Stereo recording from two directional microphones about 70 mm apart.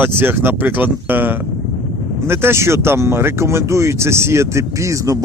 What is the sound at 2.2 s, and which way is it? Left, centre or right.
Speech, right.